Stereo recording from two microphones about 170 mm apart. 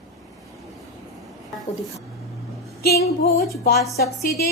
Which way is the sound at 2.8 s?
65° left (ahead or behind).